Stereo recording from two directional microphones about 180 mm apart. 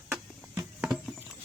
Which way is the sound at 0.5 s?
15° right (ahead or behind).